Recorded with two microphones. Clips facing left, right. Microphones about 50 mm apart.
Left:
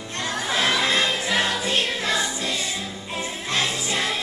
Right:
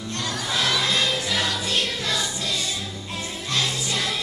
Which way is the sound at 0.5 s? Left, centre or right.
Left.